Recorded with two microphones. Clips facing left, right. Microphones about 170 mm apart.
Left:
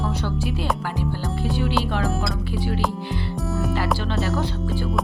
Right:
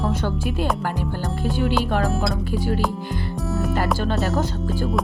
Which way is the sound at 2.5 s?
40° right (ahead or behind).